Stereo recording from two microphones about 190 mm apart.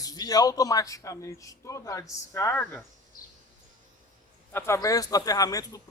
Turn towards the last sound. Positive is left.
turn(degrees=20)  # may be behind; listen again after turning